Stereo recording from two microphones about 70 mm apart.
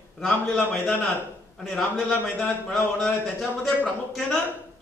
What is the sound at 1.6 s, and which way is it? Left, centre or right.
A man's voice, centre.